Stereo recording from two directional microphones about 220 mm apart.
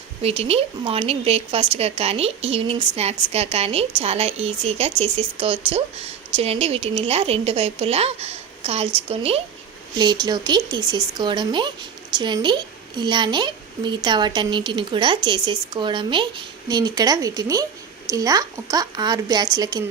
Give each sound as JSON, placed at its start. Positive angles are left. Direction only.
{"t": 0.2, "sound": "speech", "side_deg": -25}